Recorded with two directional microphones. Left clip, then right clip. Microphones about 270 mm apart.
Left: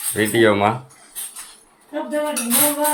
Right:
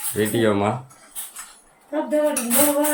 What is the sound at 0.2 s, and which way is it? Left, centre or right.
Speech, centre.